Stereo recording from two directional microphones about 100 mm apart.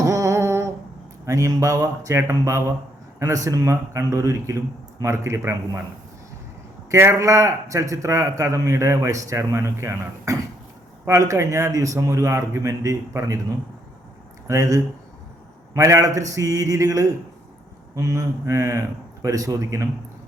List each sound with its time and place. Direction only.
0.0 s a sound: 35° right (ahead or behind)
1.2 s speech: 30° right (ahead or behind)
6.9 s speech: 30° right (ahead or behind)
14.4 s speech: 35° right (ahead or behind)